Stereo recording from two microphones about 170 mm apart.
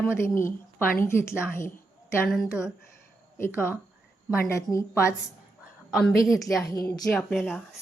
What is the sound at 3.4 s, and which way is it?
Speech, 15° left (ahead or behind).